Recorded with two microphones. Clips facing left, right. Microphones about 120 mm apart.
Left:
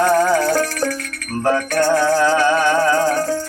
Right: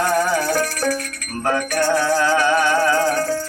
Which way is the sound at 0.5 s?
20° left (ahead or behind).